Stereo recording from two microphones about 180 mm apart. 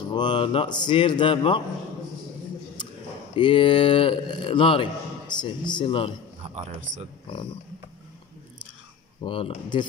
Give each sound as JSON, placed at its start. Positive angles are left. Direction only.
{"t": 0.1, "sound": "speech", "side_deg": 25}
{"t": 3.3, "sound": "speech", "side_deg": 25}
{"t": 6.4, "sound": "speech", "side_deg": -35}
{"t": 7.2, "sound": "speech", "side_deg": 30}
{"t": 9.2, "sound": "speech", "side_deg": 30}